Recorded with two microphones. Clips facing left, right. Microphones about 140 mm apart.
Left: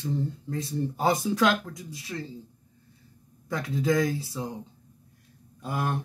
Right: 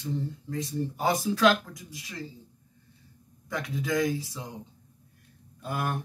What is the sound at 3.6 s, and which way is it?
Speech, 25° left (ahead or behind).